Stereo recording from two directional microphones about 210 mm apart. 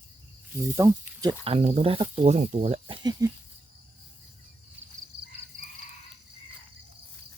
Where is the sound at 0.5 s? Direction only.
15° right (ahead or behind).